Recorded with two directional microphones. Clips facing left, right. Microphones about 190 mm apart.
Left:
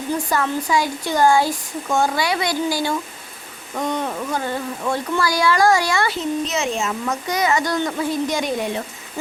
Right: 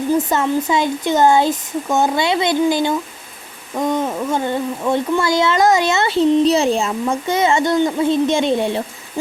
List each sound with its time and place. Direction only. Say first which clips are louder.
0.2 s speech: right 4 dB; 20° right (ahead or behind)